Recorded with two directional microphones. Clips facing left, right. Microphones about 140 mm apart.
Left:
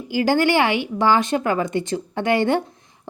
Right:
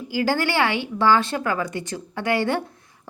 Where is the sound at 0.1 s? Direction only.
20° left (ahead or behind).